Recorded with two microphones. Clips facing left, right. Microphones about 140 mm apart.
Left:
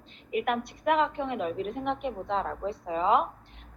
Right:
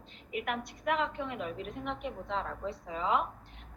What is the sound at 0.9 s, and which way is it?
A woman's voice, 65° left (ahead or behind).